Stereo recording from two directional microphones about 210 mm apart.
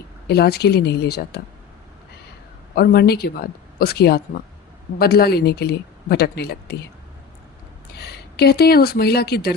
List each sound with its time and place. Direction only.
0.3 s speech: 50° left (ahead or behind)
2.7 s speech: 45° left (ahead or behind)
7.9 s speech: 50° left (ahead or behind)